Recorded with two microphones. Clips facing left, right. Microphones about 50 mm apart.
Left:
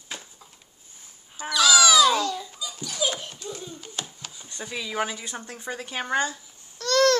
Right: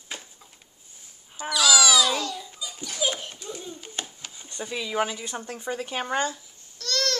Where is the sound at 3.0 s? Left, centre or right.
Centre.